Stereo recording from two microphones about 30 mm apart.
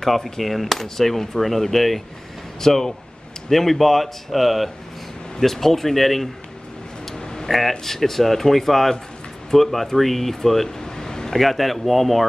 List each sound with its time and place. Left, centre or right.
0.0 s speech: centre
2.6 s speech: centre
7.4 s speech: centre
10.8 s a sound: left
11.3 s speech: centre